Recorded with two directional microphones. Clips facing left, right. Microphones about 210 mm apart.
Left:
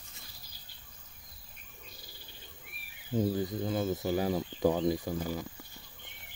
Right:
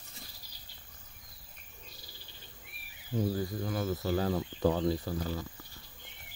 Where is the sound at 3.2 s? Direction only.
20° left (ahead or behind).